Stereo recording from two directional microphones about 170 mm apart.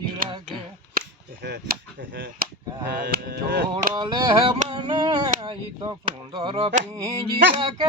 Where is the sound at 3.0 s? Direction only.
70° right (ahead or behind).